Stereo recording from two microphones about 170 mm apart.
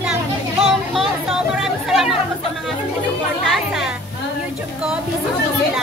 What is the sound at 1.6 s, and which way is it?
Chatter, centre (ahead or behind).